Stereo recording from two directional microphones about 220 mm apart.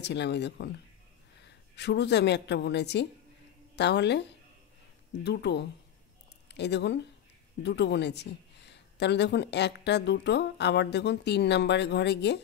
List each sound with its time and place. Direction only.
0.0 s a woman's voice: 50° left (ahead or behind)
5.2 s speech: 50° left (ahead or behind)